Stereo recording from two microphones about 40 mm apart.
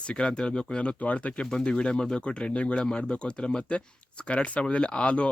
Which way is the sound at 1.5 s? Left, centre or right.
Left.